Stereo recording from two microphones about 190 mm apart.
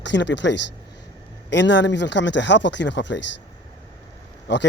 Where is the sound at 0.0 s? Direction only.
70° left (ahead or behind).